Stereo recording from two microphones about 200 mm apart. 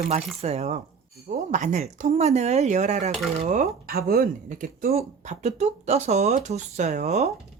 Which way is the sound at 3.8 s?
50° right (ahead or behind).